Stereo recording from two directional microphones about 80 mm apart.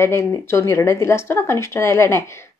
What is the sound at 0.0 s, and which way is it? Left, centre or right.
Speech, left.